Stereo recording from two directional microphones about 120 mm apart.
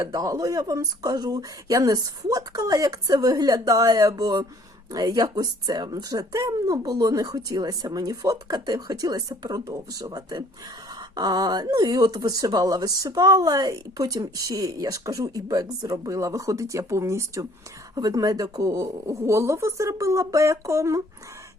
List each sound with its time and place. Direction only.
0.0 s speech: 30° right (ahead or behind)